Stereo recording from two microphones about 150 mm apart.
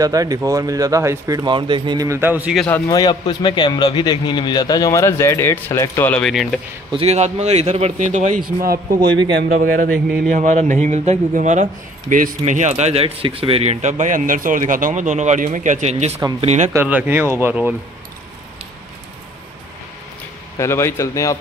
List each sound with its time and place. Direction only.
0.0 s speech: 25° right (ahead or behind)
2.7 s a man's voice: 25° left (ahead or behind); by 6.6 s centre (ahead or behind)
6.9 s a man's voice: 45° right (ahead or behind)
9.4 s speech: 75° right (ahead or behind)
10.3 s a man's voice: 55° right (ahead or behind)
16.7 s speech: 10° right (ahead or behind)
20.5 s a man's voice: 20° left (ahead or behind)